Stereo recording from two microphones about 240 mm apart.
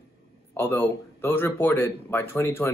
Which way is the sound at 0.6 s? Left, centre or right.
Centre.